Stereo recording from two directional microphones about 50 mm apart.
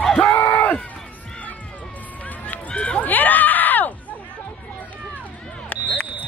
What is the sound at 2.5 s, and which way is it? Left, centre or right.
Run, left.